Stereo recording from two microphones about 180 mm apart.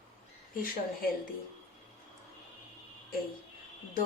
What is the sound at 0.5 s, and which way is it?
Speech, 55° left (ahead or behind).